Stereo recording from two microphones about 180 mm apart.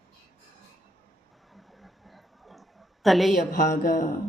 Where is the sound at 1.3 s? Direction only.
Centre (ahead or behind).